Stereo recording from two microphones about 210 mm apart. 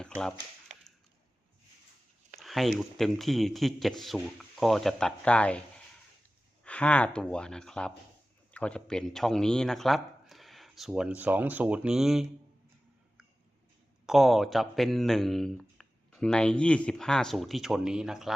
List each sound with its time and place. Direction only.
0.2 s speech: 5° left (ahead or behind)
2.4 s speech: centre (ahead or behind)
14.1 s speech: centre (ahead or behind)